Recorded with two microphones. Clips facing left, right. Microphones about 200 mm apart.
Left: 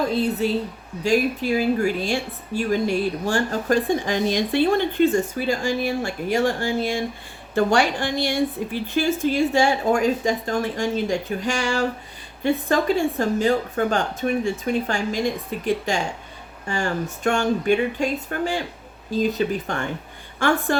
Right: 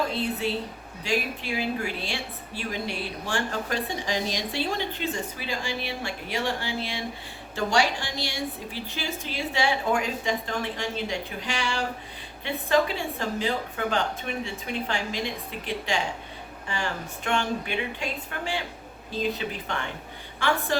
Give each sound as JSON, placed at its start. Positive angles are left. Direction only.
{"t": 0.1, "sound": "a woman's voice", "side_deg": 40}